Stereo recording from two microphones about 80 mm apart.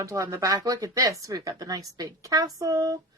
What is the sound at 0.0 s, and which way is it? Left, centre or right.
Speech, right.